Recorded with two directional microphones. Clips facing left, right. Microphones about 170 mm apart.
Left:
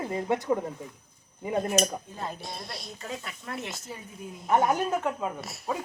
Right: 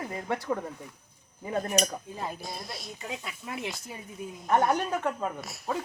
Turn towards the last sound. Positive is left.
turn(degrees=5)  # may be behind; listen again after turning